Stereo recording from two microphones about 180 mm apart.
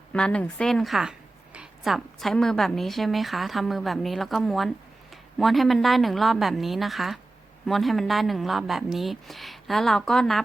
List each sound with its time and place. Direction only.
0.1 s a woman's voice: 5° left (ahead or behind)